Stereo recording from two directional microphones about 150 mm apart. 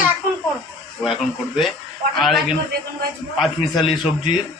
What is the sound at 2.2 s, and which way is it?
A man's voice, centre (ahead or behind).